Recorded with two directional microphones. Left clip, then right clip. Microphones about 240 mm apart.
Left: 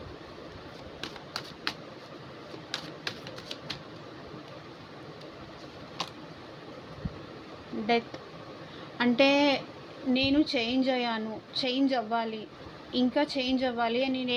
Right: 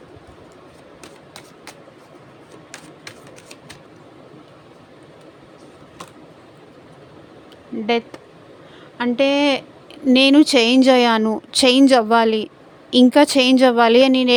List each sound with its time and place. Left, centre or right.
7.9 s a woman's voice: right
10.1 s a woman's voice: right